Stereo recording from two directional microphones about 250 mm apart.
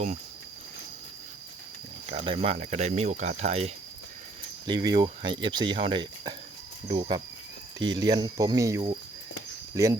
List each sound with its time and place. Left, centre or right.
2.0 s speech: right